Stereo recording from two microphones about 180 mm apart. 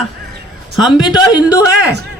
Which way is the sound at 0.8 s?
5° right (ahead or behind).